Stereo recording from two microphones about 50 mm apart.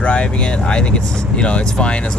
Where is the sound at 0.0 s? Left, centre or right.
Left.